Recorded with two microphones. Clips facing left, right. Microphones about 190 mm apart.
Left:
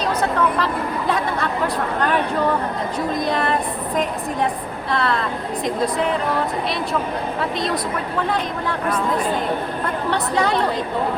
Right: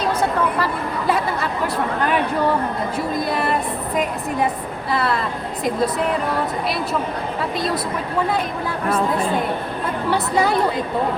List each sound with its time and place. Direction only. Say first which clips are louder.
0.0 s speech: even; 10° right (ahead or behind)
3.2 s speech: left 1 dB; 5° right (ahead or behind)
4.9 s speech: even; 5° right (ahead or behind)
10.1 s a woman's voice: right 2 dB; 5° right (ahead or behind)